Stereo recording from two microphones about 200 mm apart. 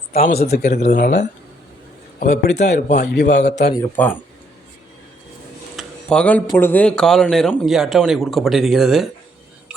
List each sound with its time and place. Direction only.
0.1 s speech: 50° left (ahead or behind)
0.7 s a man's voice: 35° left (ahead or behind)
2.1 s a man's voice: 45° left (ahead or behind)
3.2 s a man's voice: 35° left (ahead or behind)
3.8 s speech: 10° left (ahead or behind)
5.7 s speech: 5° left (ahead or behind)